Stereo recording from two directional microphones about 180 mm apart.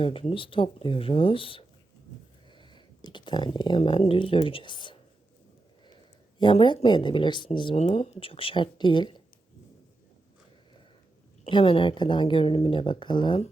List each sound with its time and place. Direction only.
0.0 s speech: 30° left (ahead or behind)
6.4 s speech: 25° left (ahead or behind)
11.4 s speech: 30° left (ahead or behind)